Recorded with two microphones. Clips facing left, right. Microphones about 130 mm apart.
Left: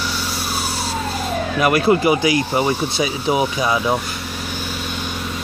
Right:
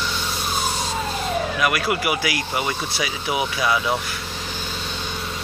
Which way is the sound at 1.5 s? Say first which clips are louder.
Left 12 dB; 35° left (ahead or behind).